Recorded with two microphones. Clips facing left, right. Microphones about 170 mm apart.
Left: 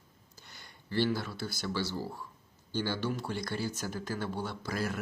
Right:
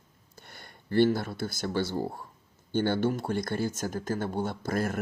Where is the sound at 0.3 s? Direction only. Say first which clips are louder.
Right 6 dB; 55° right (ahead or behind).